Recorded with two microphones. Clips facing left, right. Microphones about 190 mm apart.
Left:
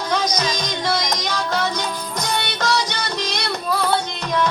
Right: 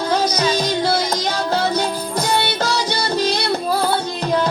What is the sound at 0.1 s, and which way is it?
Music, 30° right (ahead or behind).